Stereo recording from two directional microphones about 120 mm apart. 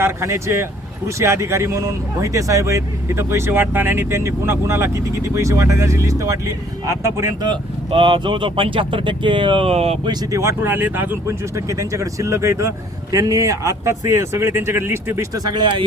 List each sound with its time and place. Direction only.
0.0 s speech: 25° right (ahead or behind)
7.4 s speech: 45° right (ahead or behind); by 10.0 s 60° right (ahead or behind)
10.1 s speech: 25° right (ahead or behind)
15.4 s speech: 40° right (ahead or behind)